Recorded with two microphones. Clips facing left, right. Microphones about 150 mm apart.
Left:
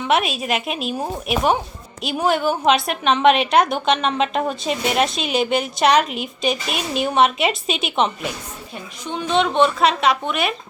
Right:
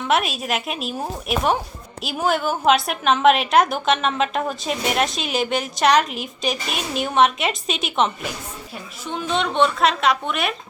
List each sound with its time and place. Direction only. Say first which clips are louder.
0.0 s a woman's voice: left 1 dB; centre (ahead or behind)